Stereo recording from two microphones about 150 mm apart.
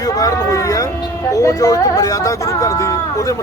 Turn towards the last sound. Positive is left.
turn(degrees=20)  # may be behind; listen again after turning